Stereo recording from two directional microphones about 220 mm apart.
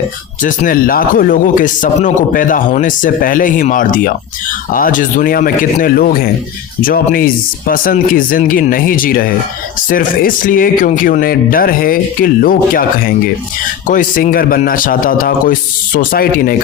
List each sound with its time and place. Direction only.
0.4 s speech: 40° left (ahead or behind)